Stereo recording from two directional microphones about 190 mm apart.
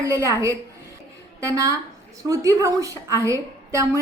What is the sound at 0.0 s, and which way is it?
A woman's voice, 15° right (ahead or behind).